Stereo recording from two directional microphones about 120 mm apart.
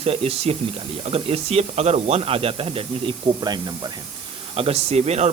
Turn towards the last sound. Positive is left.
turn(degrees=-65)  # may be behind; listen again after turning